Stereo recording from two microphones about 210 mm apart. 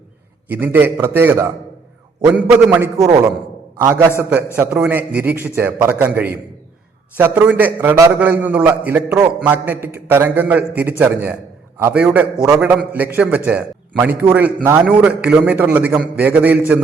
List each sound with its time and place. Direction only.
0.4 s a man's voice: 10° right (ahead or behind)